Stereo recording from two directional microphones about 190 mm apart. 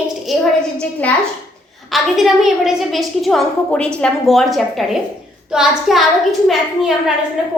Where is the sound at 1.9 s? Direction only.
Centre (ahead or behind).